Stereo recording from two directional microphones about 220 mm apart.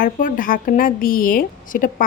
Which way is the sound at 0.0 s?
40° left (ahead or behind).